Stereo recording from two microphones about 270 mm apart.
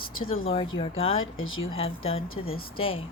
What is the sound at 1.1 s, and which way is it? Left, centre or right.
Speech, left.